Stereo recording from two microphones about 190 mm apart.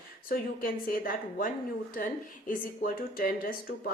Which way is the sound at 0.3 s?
50° left (ahead or behind).